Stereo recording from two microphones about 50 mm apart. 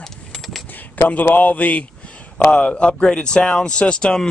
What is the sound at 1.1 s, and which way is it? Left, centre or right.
A man's voice, left.